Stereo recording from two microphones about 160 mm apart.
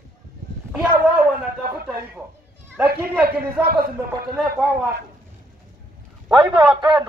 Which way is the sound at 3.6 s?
5° right (ahead or behind).